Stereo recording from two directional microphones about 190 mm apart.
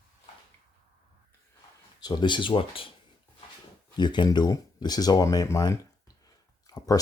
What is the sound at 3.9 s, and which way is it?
Speech, 25° left (ahead or behind).